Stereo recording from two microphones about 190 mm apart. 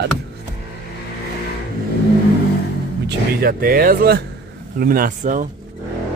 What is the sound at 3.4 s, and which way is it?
Speech, 50° right (ahead or behind).